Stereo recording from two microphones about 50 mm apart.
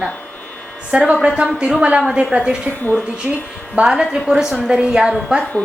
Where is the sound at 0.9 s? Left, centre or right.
Right.